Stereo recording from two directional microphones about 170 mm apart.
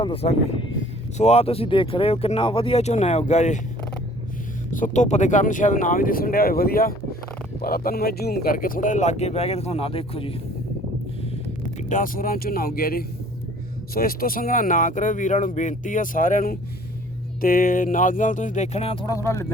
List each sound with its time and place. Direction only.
0.0 s speech: 35° left (ahead or behind)
4.7 s speech: 50° left (ahead or behind)
11.8 s speech: 50° left (ahead or behind)
19.0 s speech: 15° left (ahead or behind)